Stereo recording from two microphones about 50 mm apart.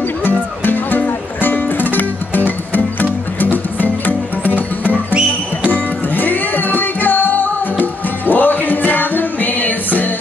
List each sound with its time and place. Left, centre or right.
0.2 s music: left